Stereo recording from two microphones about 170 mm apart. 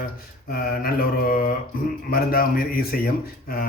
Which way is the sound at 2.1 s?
60° left (ahead or behind).